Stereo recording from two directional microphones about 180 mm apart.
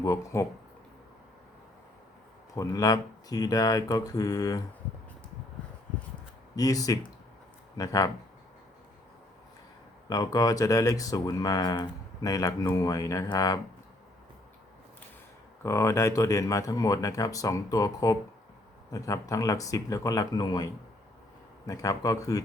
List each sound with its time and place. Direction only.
0.0 s speech: 20° left (ahead or behind)
2.6 s speech: 20° left (ahead or behind)
6.6 s speech: 20° left (ahead or behind)
10.1 s speech: 20° left (ahead or behind)
15.6 s speech: 15° left (ahead or behind)
21.7 s speech: 20° left (ahead or behind)